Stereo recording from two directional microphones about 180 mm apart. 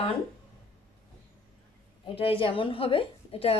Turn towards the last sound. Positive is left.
turn(degrees=30)  # may be behind; listen again after turning